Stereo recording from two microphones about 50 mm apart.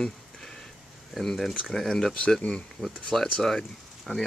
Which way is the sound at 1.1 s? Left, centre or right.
Centre.